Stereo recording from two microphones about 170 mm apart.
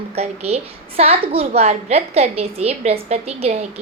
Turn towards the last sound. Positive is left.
turn(degrees=-40)  # may be behind; listen again after turning